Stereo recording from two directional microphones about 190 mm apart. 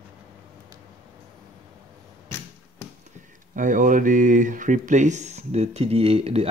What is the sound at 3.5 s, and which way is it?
Speech, 45° right (ahead or behind).